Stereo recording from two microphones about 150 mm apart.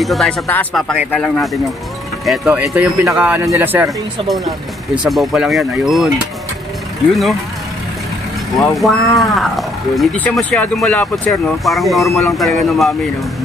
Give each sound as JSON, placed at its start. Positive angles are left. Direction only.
{"t": 0.0, "sound": "speech", "side_deg": 0}
{"t": 5.0, "sound": "speech", "side_deg": 0}
{"t": 8.5, "sound": "speech", "side_deg": 0}